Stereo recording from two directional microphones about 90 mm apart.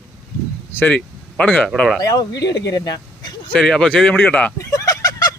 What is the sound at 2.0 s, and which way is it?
Speech, 45° left (ahead or behind).